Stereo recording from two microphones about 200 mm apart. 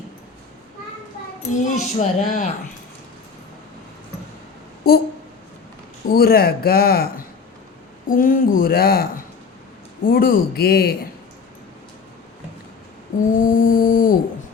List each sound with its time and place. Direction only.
1.4 s speech: 35° left (ahead or behind)
4.9 s a man's voice: 50° left (ahead or behind)
6.1 s a man's voice: 50° left (ahead or behind)
13.4 s a man's voice: 45° left (ahead or behind)